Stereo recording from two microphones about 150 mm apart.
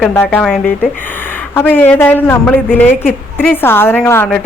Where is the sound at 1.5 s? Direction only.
15° left (ahead or behind).